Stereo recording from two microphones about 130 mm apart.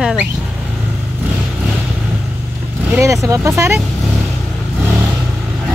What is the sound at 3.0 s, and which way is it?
Speech, 25° right (ahead or behind).